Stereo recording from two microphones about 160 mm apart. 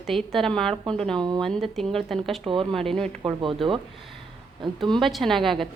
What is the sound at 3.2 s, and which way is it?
Speech, 30° right (ahead or behind).